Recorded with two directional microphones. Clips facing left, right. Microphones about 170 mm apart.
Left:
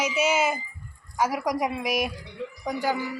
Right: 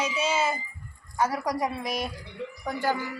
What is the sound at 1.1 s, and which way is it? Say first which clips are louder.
Speech: left 1 dB; 10° left (ahead or behind).